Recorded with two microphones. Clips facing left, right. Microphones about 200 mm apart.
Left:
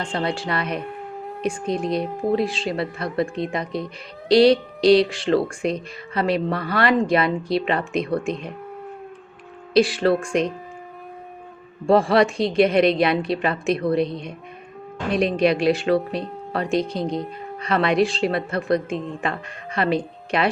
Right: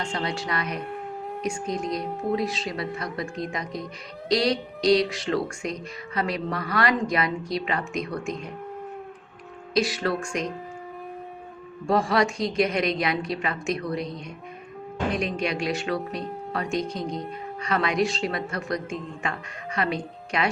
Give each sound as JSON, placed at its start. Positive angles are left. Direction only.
{"t": 0.2, "sound": "speech", "side_deg": 30}
{"t": 4.3, "sound": "a sound", "side_deg": 30}
{"t": 5.1, "sound": "speech", "side_deg": 30}
{"t": 9.7, "sound": "speech", "side_deg": 30}
{"t": 11.9, "sound": "speech", "side_deg": 30}
{"t": 15.4, "sound": "speech", "side_deg": 30}